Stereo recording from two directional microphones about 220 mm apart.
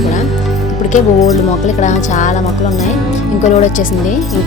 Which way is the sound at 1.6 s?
35° left (ahead or behind).